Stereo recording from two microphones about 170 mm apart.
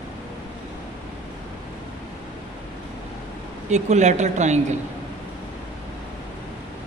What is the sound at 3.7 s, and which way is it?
Speech, 45° right (ahead or behind).